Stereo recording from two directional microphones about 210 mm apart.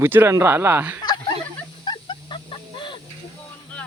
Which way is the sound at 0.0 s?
10° right (ahead or behind).